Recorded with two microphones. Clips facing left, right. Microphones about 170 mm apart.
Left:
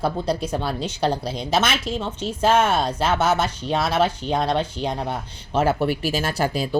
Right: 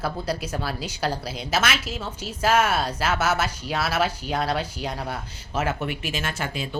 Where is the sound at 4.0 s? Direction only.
30° left (ahead or behind).